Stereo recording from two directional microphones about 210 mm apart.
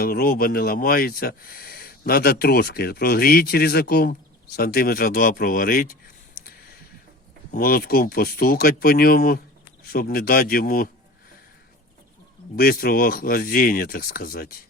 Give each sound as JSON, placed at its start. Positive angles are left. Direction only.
{"t": 0.0, "sound": "speech", "side_deg": 45}
{"t": 7.5, "sound": "speech", "side_deg": 45}
{"t": 12.5, "sound": "speech", "side_deg": 45}